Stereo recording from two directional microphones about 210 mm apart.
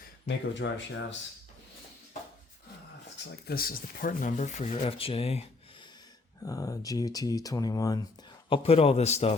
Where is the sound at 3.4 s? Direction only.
45° left (ahead or behind); by 5.9 s 25° left (ahead or behind).